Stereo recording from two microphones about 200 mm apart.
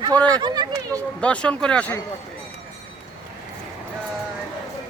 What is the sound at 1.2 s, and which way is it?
Speech, 5° left (ahead or behind).